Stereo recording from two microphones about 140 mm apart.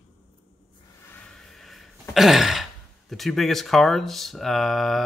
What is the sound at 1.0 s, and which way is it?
Sigh, 10° left (ahead or behind).